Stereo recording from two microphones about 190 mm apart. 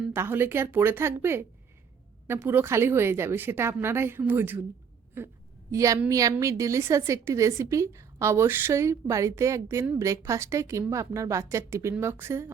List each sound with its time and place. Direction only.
0.1 s a woman's voice: 10° right (ahead or behind)